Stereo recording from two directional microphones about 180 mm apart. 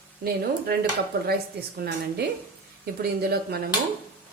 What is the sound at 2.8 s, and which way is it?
Speech, 60° right (ahead or behind).